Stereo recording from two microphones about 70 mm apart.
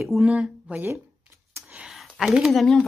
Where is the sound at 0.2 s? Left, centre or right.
Centre.